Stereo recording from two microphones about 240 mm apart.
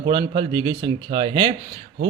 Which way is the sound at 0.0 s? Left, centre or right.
Centre.